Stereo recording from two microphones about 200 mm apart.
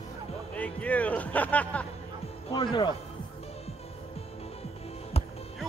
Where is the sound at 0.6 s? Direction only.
5° left (ahead or behind).